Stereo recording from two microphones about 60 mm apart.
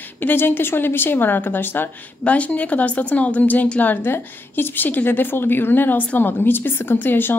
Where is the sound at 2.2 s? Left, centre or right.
Left.